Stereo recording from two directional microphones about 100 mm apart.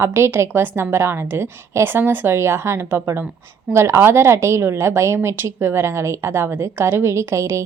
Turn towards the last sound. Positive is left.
turn(degrees=-30)  # may be behind; listen again after turning